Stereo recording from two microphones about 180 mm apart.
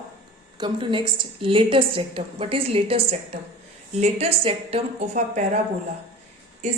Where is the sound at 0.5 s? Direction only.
25° right (ahead or behind).